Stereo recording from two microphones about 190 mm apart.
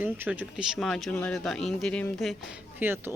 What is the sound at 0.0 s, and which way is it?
Speech, 10° right (ahead or behind).